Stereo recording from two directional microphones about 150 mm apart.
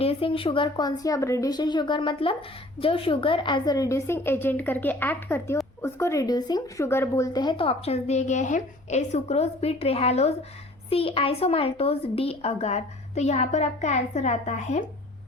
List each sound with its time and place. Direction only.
0.0 s a woman's voice: 40° left (ahead or behind)